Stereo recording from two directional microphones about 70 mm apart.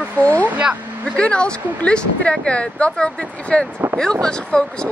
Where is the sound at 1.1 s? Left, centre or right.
Centre.